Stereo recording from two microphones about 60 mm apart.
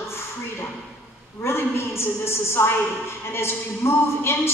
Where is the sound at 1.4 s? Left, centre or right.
Left.